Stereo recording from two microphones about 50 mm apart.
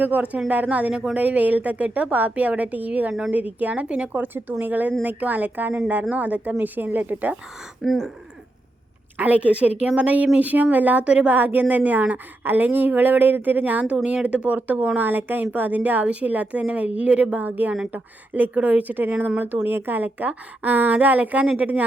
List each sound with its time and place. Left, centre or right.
0.0 s a woman's voice: right
1.2 s a woman's voice: right
3.1 s a woman's voice: centre
3.3 s a woman's voice: right
4.1 s a woman's voice: right
7.8 s speech: centre
9.1 s a woman's voice: right
13.8 s a woman's voice: right